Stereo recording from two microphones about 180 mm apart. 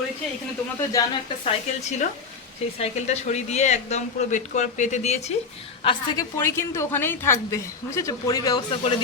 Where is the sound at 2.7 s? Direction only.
40° left (ahead or behind).